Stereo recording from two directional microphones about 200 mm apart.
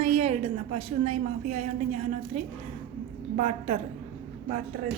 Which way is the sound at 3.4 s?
30° right (ahead or behind).